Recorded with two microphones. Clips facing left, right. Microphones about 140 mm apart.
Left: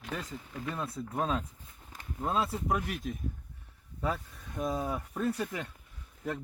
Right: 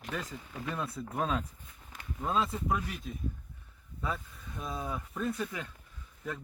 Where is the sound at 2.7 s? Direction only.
55° left (ahead or behind).